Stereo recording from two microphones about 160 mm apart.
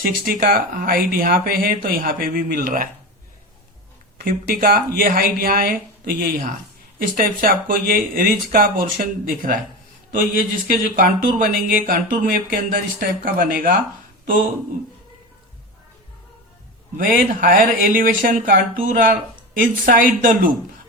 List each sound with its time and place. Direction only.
0.3 s speech: 65° right (ahead or behind)
4.2 s speech: 60° right (ahead or behind)
17.0 s speech: 65° right (ahead or behind)